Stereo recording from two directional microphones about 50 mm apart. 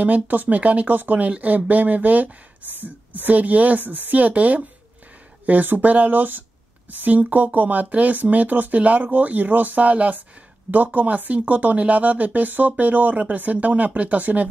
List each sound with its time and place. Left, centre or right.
0.0 s speech: right
2.6 s a sound: right
3.3 s speech: right